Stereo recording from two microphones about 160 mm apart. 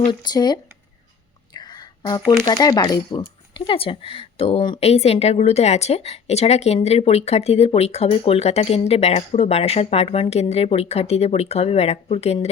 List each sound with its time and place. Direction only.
0.1 s speech: 25° left (ahead or behind)
1.5 s a sound: 25° left (ahead or behind)
2.5 s speech: 25° left (ahead or behind); by 12.5 s 40° left (ahead or behind)